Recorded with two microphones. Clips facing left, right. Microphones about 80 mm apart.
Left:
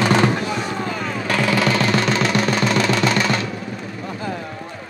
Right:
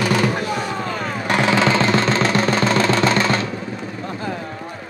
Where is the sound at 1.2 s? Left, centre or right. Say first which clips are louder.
Right 2 dB; right.